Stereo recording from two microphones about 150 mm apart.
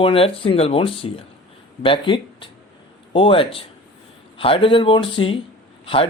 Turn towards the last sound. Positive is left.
turn(degrees=40)  # may be behind; listen again after turning